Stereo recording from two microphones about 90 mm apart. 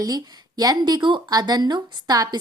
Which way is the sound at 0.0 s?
45° right (ahead or behind).